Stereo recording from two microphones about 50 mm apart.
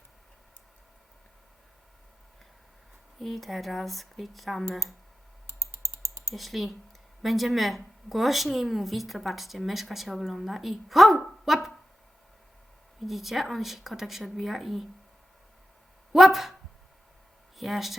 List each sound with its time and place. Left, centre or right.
3.2 s a woman's voice: centre
5.5 s computer keyboard: right
6.3 s a woman's voice: centre
13.1 s a woman's voice: centre
16.1 s a woman's voice: centre
17.6 s a woman's voice: centre